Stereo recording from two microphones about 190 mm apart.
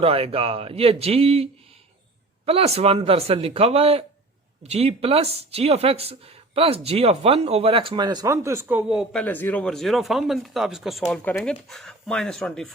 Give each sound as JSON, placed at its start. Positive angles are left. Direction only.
{"t": 0.0, "sound": "speech", "side_deg": -30}
{"t": 2.5, "sound": "speech", "side_deg": -30}
{"t": 9.2, "sound": "speech", "side_deg": 10}